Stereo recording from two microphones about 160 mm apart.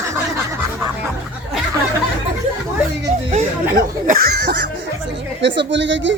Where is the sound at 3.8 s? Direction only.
65° right (ahead or behind).